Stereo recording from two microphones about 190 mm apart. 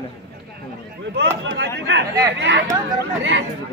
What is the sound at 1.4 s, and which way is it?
Speech, 70° right (ahead or behind).